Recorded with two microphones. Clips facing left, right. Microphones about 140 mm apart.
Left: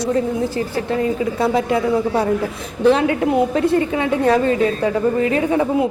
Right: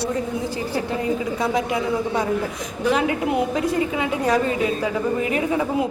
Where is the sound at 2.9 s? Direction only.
25° left (ahead or behind).